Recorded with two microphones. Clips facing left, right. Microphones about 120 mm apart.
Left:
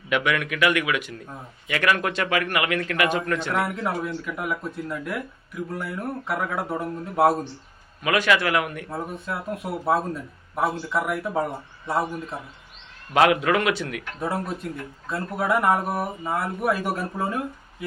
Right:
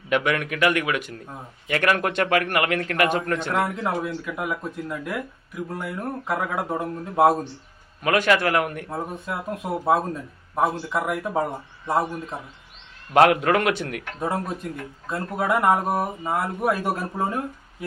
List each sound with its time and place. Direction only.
0.1 s a man's voice: 40° right (ahead or behind)
3.5 s speech: 20° right (ahead or behind)
8.0 s a man's voice: 45° right (ahead or behind)
8.9 s speech: 20° right (ahead or behind)
13.1 s a man's voice: 45° right (ahead or behind)
14.2 s speech: 20° right (ahead or behind)